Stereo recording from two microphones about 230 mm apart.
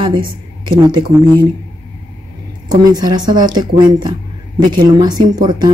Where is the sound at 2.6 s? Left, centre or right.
Centre.